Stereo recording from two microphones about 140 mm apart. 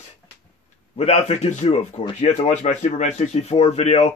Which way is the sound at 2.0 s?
25° left (ahead or behind).